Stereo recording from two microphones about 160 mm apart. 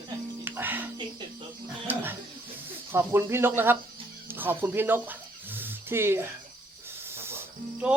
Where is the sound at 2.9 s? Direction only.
15° right (ahead or behind).